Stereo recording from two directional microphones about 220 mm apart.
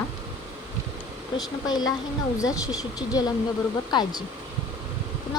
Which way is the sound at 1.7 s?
20° left (ahead or behind).